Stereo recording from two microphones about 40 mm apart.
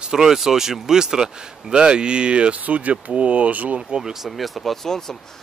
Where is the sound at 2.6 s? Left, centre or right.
Right.